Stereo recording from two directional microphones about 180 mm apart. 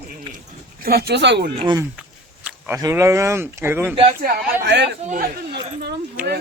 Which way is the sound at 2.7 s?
15° right (ahead or behind).